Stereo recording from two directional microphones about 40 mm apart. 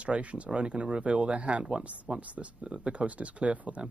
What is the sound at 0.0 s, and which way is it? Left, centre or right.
Speech, right.